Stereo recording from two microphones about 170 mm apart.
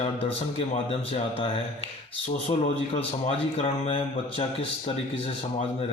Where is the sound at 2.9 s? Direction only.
35° left (ahead or behind).